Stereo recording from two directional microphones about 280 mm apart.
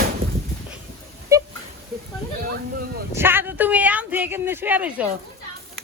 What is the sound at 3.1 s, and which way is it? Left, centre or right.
Speech, centre.